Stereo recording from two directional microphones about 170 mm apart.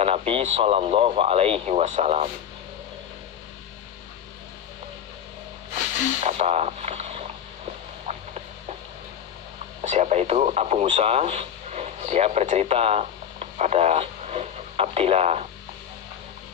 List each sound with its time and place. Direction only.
0.0 s speech: 35° right (ahead or behind)
6.2 s a sound: 40° right (ahead or behind)
9.8 s speech: 40° right (ahead or behind)